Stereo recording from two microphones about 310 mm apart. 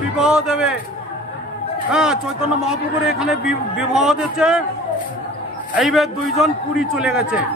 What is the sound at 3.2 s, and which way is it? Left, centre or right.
Speech, centre.